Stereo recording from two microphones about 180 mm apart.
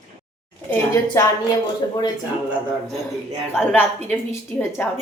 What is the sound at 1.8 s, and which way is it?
Speech, 20° left (ahead or behind).